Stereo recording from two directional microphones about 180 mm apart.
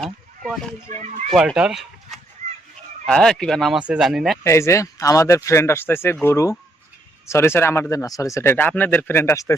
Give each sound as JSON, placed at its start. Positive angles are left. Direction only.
{"t": 0.0, "sound": "a sound", "side_deg": 0}
{"t": 1.3, "sound": "speech", "side_deg": 0}
{"t": 4.4, "sound": "speech", "side_deg": 15}